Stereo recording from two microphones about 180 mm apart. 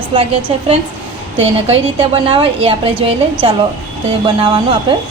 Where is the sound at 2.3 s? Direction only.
30° right (ahead or behind).